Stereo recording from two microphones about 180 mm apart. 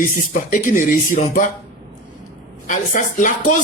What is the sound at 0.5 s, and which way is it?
Speech, 45° left (ahead or behind).